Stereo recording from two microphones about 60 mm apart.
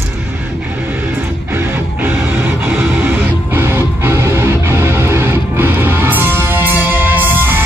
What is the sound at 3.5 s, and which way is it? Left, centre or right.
Music, right.